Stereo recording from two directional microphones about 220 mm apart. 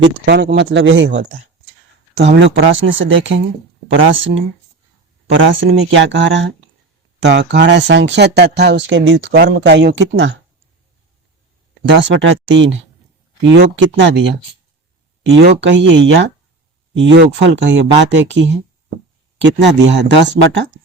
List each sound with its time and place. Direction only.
0.0 s speech: 50° right (ahead or behind)
11.9 s speech: 55° right (ahead or behind)
15.3 s speech: 55° right (ahead or behind)
20.1 s speech: 55° right (ahead or behind)